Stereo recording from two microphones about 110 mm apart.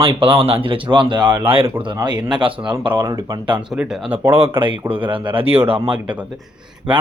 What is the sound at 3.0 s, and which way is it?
Speech, 35° right (ahead or behind).